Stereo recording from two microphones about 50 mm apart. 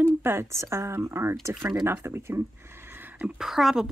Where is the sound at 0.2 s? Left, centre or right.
Right.